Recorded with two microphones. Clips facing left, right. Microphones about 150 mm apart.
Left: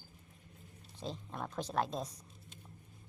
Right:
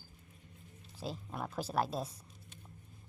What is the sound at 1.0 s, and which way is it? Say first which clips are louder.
A woman's voice: right 1 dB; 5° right (ahead or behind).